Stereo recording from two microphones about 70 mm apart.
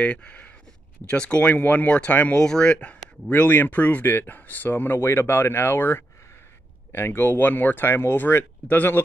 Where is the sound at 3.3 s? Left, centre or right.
Left.